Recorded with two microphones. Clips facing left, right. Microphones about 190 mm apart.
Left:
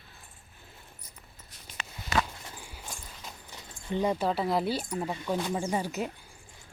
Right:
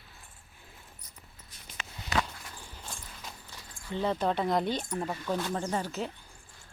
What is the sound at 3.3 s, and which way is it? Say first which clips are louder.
Speech: left 1 dB; 20° left (ahead or behind).